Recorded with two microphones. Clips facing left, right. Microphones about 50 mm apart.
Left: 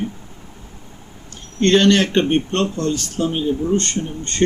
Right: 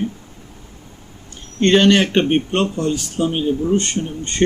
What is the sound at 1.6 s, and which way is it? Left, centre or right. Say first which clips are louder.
Speech: right 1 dB; centre.